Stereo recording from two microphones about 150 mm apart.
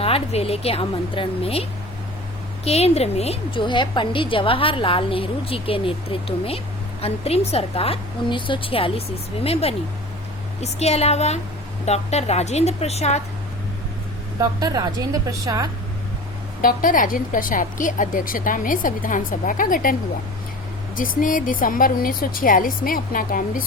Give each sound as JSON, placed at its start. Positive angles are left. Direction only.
{"t": 0.0, "sound": "a woman's voice", "side_deg": 40}
{"t": 2.6, "sound": "a woman's voice", "side_deg": 45}
{"t": 14.3, "sound": "a woman's voice", "side_deg": -25}
{"t": 16.6, "sound": "a woman's voice", "side_deg": 65}